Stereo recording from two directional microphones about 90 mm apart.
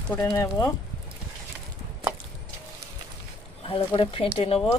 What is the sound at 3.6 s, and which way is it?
Speech, 90° left.